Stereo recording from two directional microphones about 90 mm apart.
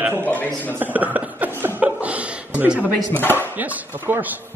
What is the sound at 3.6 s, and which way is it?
Speech, 20° right (ahead or behind).